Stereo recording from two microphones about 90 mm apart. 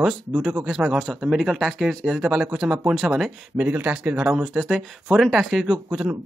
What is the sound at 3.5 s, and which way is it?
Speech, 20° right (ahead or behind).